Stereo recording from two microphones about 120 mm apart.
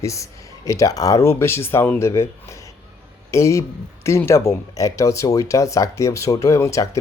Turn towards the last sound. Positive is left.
turn(degrees=25)  # may be behind; listen again after turning